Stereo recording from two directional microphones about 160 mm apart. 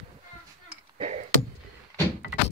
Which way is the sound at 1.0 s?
50° right (ahead or behind).